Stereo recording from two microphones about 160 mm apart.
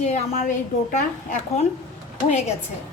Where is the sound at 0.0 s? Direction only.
45° left (ahead or behind).